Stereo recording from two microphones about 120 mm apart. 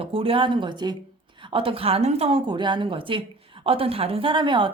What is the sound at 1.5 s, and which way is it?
Speech, 50° right (ahead or behind).